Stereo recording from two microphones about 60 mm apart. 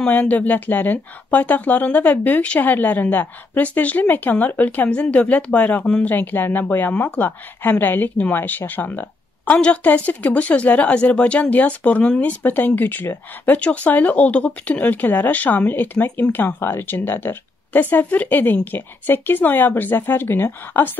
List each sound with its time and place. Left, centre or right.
0.0 s speech: left
9.5 s speech: left